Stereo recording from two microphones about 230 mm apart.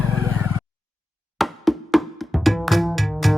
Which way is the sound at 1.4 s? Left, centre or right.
Centre.